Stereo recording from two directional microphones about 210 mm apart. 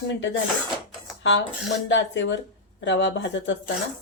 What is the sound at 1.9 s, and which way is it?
Speech, 60° left (ahead or behind).